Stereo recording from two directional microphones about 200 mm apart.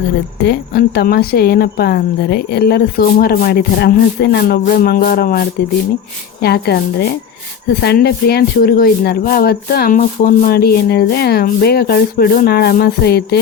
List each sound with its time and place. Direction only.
0.4 s speech: 55° left (ahead or behind)